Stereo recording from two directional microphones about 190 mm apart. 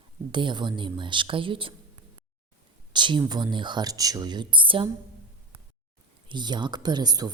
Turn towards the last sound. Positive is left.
turn(degrees=-20)  # may be behind; listen again after turning